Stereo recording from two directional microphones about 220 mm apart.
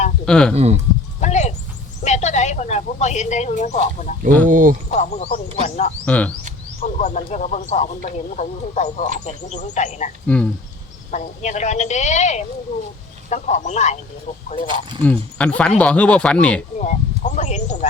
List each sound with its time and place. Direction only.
0.3 s speech: 5° left (ahead or behind)
0.5 s speech: 30° right (ahead or behind)
1.2 s a sound: 30° left (ahead or behind)
2.0 s speech: 30° left (ahead or behind)
4.4 s speech: 40° right (ahead or behind)
4.9 s speech: 30° left (ahead or behind)
6.1 s speech: 5° left (ahead or behind)
6.8 s speech: 35° left (ahead or behind)
10.3 s speech: 5° left (ahead or behind)
11.1 s speech: 35° left (ahead or behind)
14.7 s speech: 20° right (ahead or behind)
15.0 s speech: 5° left (ahead or behind)
16.7 s speech: 35° left (ahead or behind)